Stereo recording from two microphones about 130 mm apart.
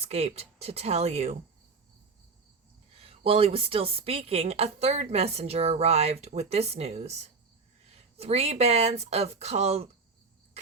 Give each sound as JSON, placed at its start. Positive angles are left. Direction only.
{"t": 0.0, "sound": "a woman's voice", "side_deg": -55}
{"t": 3.0, "sound": "a woman's voice", "side_deg": -45}